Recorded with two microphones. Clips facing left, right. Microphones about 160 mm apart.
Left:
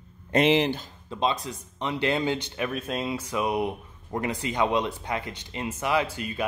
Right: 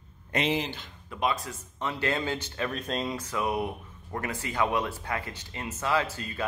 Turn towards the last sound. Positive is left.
turn(degrees=15)  # may be behind; listen again after turning